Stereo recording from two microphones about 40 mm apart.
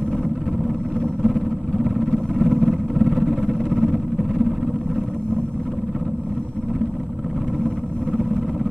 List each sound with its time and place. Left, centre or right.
1.2 s a sound: centre
2.0 s vehicle: centre
7.6 s vehicle: centre